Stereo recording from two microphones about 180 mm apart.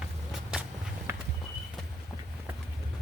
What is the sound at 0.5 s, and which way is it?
Walk, 5° right (ahead or behind).